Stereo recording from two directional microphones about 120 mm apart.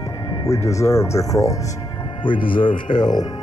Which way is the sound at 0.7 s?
25° left (ahead or behind).